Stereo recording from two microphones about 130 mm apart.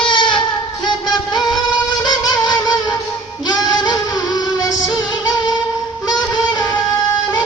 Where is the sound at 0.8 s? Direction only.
35° left (ahead or behind).